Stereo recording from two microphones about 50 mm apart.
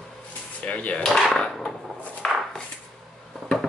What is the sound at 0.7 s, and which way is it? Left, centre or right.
Speech, left.